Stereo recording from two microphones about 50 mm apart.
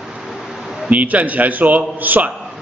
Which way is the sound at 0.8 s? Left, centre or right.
Right.